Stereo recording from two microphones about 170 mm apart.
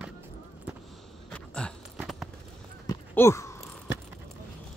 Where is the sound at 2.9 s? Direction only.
15° left (ahead or behind).